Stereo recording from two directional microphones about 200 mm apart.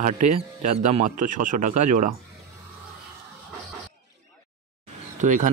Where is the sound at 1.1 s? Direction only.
40° right (ahead or behind).